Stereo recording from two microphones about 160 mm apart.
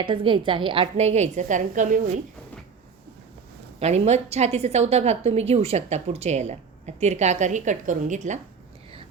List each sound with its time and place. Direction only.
0.0 s a woman's voice: 30° right (ahead or behind); by 2.2 s 50° right (ahead or behind)
3.8 s a woman's voice: 45° right (ahead or behind)